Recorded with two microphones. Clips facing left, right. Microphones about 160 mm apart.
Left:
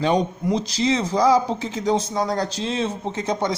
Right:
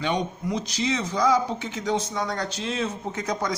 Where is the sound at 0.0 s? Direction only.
35° left (ahead or behind).